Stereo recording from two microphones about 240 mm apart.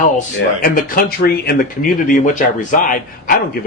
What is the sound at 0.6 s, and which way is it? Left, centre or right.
A man's voice, left.